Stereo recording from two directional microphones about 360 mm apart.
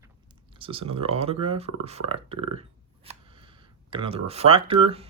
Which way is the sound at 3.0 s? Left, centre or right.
Centre.